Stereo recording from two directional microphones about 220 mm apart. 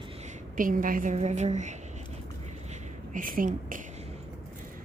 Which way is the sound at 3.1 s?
40° right (ahead or behind).